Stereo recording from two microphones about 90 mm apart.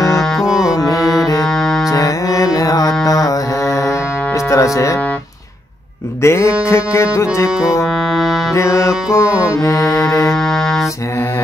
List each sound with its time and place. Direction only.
0.2 s music: centre (ahead or behind)
0.7 s music: 40° left (ahead or behind)
1.4 s music: 5° left (ahead or behind)
1.9 s mantra: 40° left (ahead or behind)
3.1 s music: 40° left (ahead or behind)
6.2 s music: 30° left (ahead or behind)
7.4 s music: 5° right (ahead or behind)
8.5 s music: 35° left (ahead or behind)
10.3 s music: 5° left (ahead or behind)